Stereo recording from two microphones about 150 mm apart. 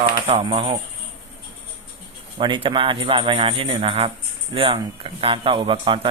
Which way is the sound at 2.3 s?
35° right (ahead or behind).